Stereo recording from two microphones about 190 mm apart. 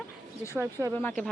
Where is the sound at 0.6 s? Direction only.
15° right (ahead or behind).